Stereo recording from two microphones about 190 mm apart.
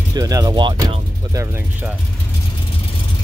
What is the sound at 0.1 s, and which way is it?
Speech, 20° right (ahead or behind).